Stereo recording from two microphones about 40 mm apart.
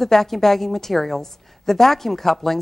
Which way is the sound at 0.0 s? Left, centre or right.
Centre.